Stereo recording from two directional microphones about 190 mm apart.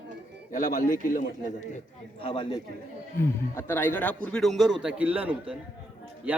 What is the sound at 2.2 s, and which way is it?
Speech, 25° left (ahead or behind).